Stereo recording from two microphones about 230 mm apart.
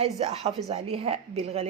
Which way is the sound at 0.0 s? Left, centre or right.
Right.